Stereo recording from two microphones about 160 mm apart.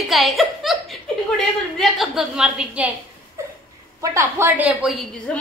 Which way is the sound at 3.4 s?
20° right (ahead or behind).